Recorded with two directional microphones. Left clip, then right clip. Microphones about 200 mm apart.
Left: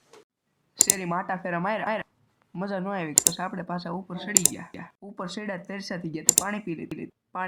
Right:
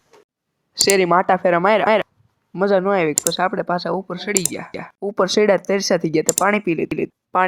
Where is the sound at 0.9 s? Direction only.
40° right (ahead or behind).